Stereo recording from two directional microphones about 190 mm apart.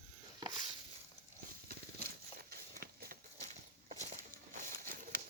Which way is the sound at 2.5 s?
55° right (ahead or behind).